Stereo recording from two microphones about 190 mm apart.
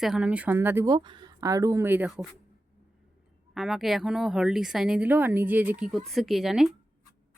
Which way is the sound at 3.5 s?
Centre (ahead or behind).